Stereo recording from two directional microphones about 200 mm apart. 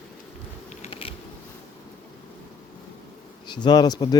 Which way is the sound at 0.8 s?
25° left (ahead or behind).